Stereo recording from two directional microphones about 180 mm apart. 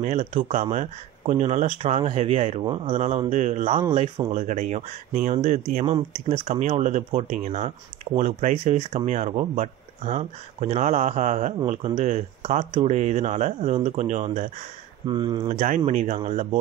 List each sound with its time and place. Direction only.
0.0 s speech: 45° right (ahead or behind)
15.0 s speech: 25° right (ahead or behind)
15.4 s speech: 45° right (ahead or behind)